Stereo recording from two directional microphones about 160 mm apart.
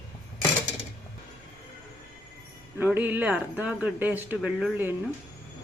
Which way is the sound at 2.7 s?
10° right (ahead or behind).